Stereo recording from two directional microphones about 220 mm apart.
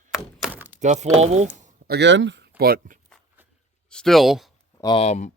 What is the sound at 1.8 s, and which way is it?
Speech, 50° right (ahead or behind).